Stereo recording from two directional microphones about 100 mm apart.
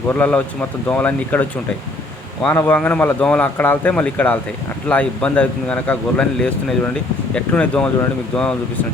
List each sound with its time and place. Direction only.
0.1 s speech: 15° left (ahead or behind)
2.5 s speech: 20° left (ahead or behind)